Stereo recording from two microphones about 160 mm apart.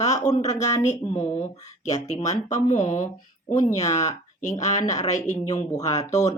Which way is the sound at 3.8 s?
20° left (ahead or behind).